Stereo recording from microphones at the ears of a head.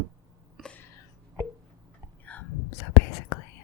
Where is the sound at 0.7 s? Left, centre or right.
Left.